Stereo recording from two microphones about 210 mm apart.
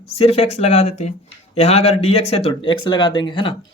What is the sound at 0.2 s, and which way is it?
Speech, 30° left (ahead or behind).